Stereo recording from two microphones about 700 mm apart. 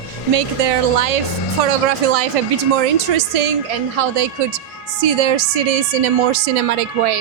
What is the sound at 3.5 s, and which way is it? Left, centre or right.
A woman's voice, right.